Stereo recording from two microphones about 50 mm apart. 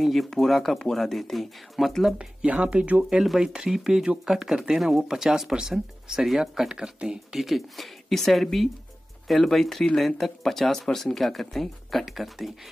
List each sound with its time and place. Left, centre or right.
0.0 s speech: centre
2.4 s speech: right
4.7 s speech: centre
7.3 s speech: centre